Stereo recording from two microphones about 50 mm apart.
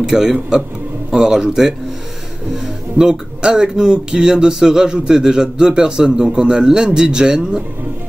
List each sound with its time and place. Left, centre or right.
0.0 s speech: centre